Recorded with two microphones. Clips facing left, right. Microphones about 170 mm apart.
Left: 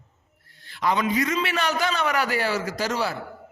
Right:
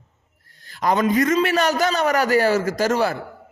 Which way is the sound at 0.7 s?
45° right (ahead or behind).